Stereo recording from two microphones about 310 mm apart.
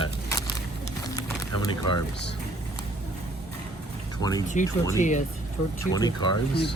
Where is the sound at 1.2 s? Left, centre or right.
Centre.